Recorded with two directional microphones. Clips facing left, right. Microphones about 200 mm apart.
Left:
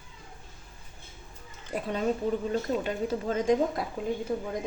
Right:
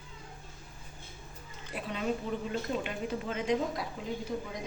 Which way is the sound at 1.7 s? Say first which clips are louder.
Left 6 dB; 45° left (ahead or behind).